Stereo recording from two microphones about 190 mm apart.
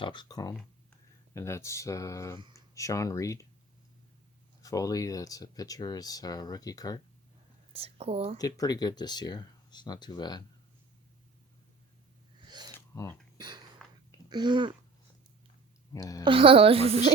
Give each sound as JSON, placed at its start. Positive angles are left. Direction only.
{"t": 0.0, "sound": "speech", "side_deg": 25}
{"t": 4.6, "sound": "speech", "side_deg": 20}
{"t": 7.7, "sound": "speech", "side_deg": -30}
{"t": 8.4, "sound": "speech", "side_deg": 20}
{"t": 12.4, "sound": "a sound", "side_deg": -20}
{"t": 12.7, "sound": "a sound", "side_deg": 15}
{"t": 13.4, "sound": "a sound", "side_deg": -20}
{"t": 14.3, "sound": "a woman's voice", "side_deg": -25}
{"t": 15.9, "sound": "speech", "side_deg": 15}
{"t": 16.2, "sound": "a woman's voice", "side_deg": -30}